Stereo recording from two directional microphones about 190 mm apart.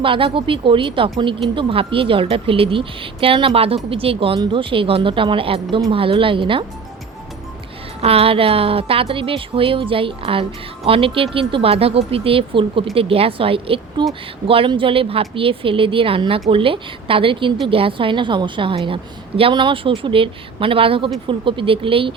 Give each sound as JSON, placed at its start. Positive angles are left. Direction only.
{"t": 0.0, "sound": "speech", "side_deg": -25}
{"t": 8.0, "sound": "speech", "side_deg": -30}